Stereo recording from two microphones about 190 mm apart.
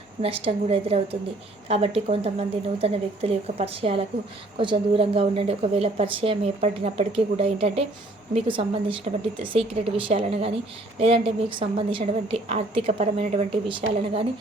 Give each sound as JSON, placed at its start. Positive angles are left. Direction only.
{"t": 0.2, "sound": "a woman's voice", "side_deg": -30}